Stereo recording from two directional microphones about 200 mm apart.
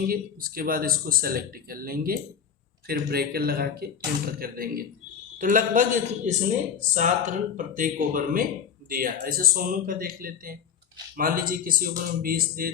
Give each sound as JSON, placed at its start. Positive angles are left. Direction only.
{"t": 0.1, "sound": "speech", "side_deg": -45}